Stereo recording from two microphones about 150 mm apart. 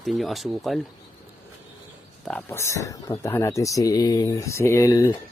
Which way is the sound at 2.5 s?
20° left (ahead or behind).